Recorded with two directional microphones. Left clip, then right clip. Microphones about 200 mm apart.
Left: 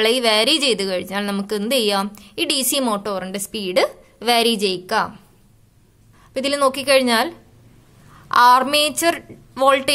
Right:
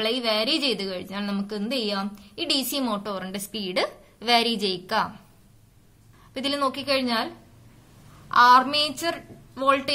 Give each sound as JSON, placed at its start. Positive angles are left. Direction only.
{"t": 0.0, "sound": "a woman's voice", "side_deg": 40}
{"t": 6.3, "sound": "a woman's voice", "side_deg": 35}